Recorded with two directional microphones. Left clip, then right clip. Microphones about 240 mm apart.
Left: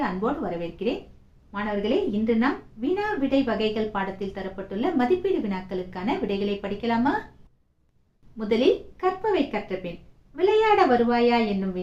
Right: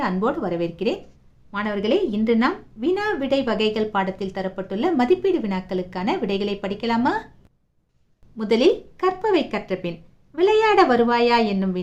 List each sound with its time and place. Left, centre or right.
0.0 s a woman's voice: right
8.4 s a woman's voice: right